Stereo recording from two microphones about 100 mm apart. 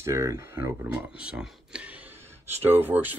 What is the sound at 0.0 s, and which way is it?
Speech, 25° right (ahead or behind).